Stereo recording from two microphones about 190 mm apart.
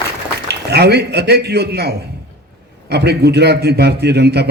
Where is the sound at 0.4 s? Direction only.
60° right (ahead or behind).